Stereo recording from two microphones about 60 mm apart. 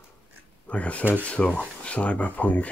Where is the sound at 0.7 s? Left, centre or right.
Left.